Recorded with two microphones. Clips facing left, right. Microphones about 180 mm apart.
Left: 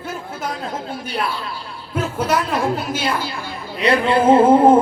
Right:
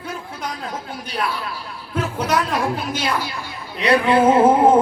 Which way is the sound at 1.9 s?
10° left (ahead or behind).